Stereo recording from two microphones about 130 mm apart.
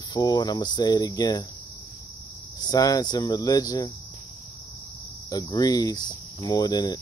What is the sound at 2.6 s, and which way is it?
Speech, 30° left (ahead or behind).